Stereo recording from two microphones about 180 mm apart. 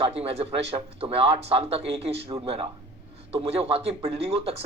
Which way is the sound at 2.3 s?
15° right (ahead or behind).